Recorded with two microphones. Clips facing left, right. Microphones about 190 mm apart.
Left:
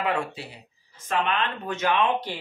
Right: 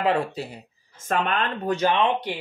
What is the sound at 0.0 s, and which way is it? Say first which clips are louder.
Speech: right 4 dB; 35° right (ahead or behind).